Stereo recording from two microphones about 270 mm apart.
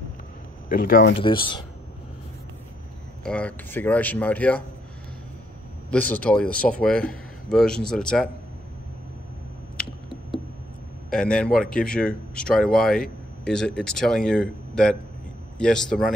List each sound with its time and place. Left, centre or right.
0.7 s speech: left
1.2 s speech: centre
3.3 s a man's voice: centre
5.9 s a man's voice: centre
11.1 s a man's voice: centre